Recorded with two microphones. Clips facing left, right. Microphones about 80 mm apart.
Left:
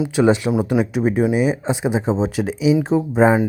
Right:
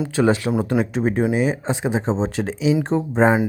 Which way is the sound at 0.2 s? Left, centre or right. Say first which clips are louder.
Left 2 dB; centre.